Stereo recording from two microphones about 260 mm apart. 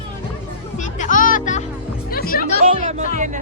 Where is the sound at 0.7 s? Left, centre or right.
Left.